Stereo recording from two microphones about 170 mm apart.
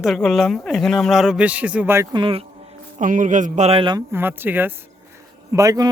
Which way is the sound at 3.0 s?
50° right (ahead or behind).